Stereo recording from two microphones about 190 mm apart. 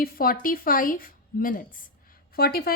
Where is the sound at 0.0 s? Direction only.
50° left (ahead or behind).